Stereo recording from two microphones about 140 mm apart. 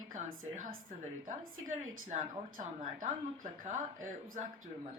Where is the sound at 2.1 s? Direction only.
65° right (ahead or behind).